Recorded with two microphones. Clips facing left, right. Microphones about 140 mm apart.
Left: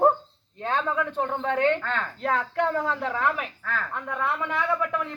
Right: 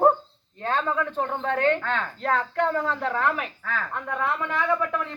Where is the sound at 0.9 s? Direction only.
10° left (ahead or behind).